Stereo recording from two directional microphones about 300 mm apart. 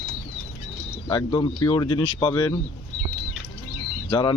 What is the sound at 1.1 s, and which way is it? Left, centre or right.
Speech, centre.